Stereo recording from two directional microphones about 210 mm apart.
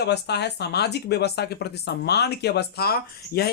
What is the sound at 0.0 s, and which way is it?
Speech, 55° left (ahead or behind).